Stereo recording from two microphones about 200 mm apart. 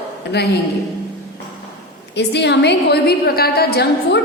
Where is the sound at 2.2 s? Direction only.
60° left (ahead or behind).